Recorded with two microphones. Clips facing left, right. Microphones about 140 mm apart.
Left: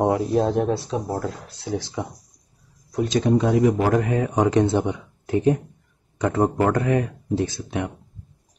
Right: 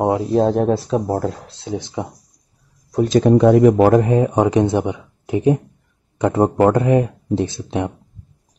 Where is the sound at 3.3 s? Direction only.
60° right (ahead or behind).